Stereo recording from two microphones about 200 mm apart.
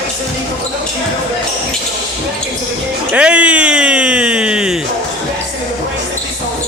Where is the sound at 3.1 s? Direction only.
5° right (ahead or behind).